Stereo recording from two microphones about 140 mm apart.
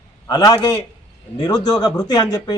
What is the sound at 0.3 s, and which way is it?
A man's voice, 25° left (ahead or behind).